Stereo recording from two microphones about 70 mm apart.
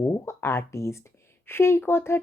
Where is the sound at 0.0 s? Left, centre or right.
Left.